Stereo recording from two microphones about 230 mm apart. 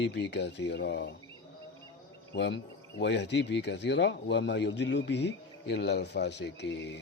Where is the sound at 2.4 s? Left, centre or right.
Left.